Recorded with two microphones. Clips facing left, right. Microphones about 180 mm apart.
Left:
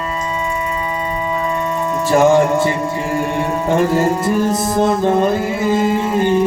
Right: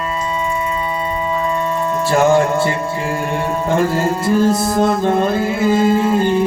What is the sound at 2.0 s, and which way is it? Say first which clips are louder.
Music: left 2 dB; 15° left (ahead or behind).